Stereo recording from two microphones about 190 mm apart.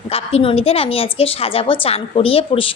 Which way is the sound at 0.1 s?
30° left (ahead or behind).